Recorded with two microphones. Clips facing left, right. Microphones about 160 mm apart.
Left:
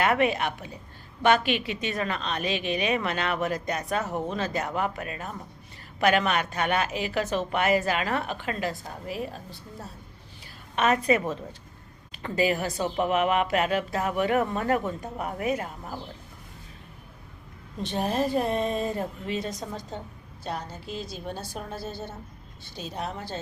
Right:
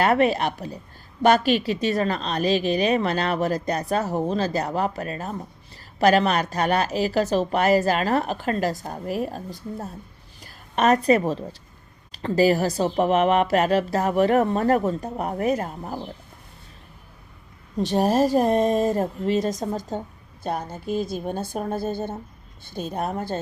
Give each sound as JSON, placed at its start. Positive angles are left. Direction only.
{"t": 0.0, "sound": "a woman's voice", "side_deg": -35}
{"t": 17.7, "sound": "speech", "side_deg": -40}